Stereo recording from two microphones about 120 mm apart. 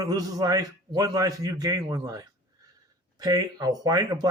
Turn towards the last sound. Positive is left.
turn(degrees=-30)  # may be behind; listen again after turning